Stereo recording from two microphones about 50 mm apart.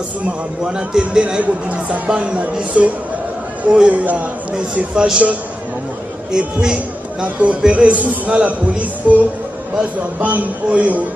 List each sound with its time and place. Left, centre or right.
0.7 s a man's voice: centre
6.3 s speech: centre
7.3 s speech: right
10.2 s speech: right